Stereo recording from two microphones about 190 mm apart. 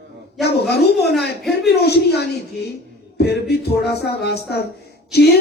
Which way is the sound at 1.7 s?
60° left (ahead or behind).